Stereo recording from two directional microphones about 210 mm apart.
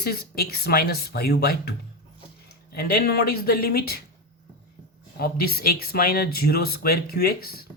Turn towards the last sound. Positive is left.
turn(degrees=45)  # may be behind; listen again after turning